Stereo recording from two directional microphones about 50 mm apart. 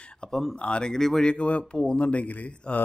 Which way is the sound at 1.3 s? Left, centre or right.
Left.